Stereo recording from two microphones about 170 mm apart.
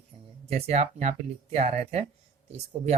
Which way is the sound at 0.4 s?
40° right (ahead or behind).